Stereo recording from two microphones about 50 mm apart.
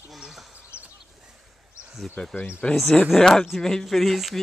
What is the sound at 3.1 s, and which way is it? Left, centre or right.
Speech, centre.